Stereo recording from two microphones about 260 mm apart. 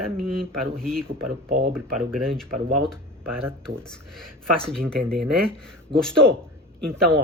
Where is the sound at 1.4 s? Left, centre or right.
Right.